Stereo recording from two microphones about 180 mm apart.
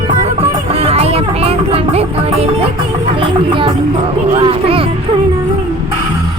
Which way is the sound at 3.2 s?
30° right (ahead or behind).